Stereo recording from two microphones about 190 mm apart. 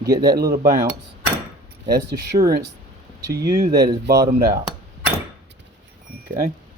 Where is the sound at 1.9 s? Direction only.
55° right (ahead or behind).